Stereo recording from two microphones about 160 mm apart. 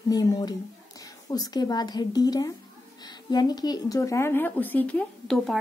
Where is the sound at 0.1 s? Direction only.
25° left (ahead or behind).